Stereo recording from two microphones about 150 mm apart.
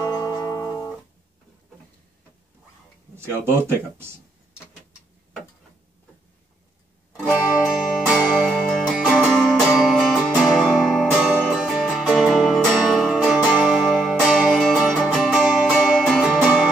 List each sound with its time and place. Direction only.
0.1 s music: 25° left (ahead or behind)
7.1 s music: 10° right (ahead or behind)
7.6 s music: centre (ahead or behind)